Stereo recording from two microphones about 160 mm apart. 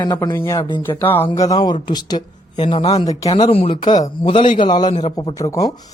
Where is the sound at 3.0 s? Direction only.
25° left (ahead or behind).